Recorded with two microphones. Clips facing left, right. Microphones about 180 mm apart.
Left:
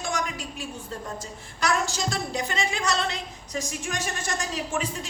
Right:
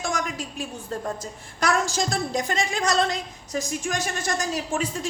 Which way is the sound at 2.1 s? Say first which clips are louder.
Right 3 dB; 45° right (ahead or behind).